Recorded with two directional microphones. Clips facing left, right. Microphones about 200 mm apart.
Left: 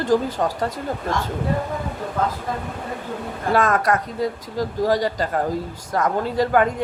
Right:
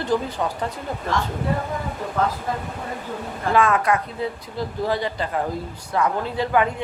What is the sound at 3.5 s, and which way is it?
Speech, 40° left (ahead or behind).